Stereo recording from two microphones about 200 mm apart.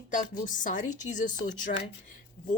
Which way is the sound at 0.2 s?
40° left (ahead or behind).